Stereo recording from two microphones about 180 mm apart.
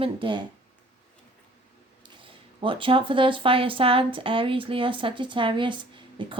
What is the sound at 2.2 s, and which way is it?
Speech, 30° right (ahead or behind).